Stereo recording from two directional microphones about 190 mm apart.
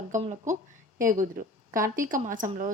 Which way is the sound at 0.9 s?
45° right (ahead or behind).